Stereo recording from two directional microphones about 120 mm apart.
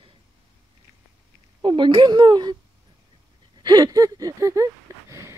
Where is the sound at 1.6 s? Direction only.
45° right (ahead or behind).